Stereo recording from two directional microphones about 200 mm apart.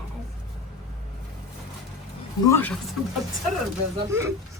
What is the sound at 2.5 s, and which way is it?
Speech, 10° left (ahead or behind).